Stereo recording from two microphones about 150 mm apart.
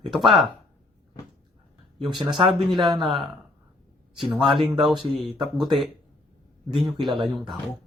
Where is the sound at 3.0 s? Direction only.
Centre (ahead or behind).